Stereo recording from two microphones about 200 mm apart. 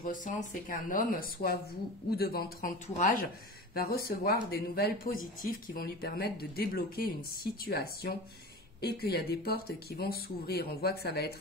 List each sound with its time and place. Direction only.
0.0 s speech: 40° left (ahead or behind)